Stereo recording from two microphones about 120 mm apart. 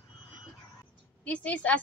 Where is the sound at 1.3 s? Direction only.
10° left (ahead or behind).